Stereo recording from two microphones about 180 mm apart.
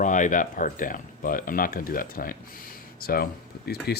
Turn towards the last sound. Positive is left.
turn(degrees=60)  # may be behind; listen again after turning